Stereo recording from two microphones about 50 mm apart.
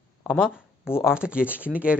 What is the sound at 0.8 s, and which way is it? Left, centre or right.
Speech, left.